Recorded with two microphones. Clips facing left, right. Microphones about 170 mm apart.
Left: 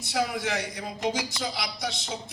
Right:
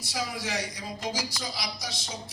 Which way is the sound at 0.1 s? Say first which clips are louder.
Left 5 dB; 60° left (ahead or behind).